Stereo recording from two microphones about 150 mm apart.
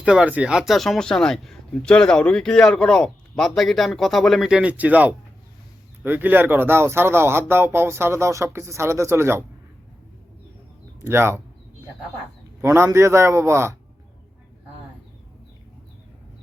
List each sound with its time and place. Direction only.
0.0 s speech: 5° right (ahead or behind)
11.0 s speech: 15° right (ahead or behind)
12.6 s a man's voice: 20° right (ahead or behind)